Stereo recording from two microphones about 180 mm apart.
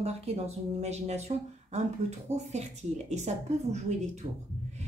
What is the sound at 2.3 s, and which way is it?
A woman's voice, 40° right (ahead or behind).